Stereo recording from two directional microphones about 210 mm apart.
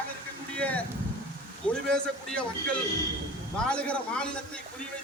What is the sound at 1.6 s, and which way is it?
A man's voice, 5° left (ahead or behind).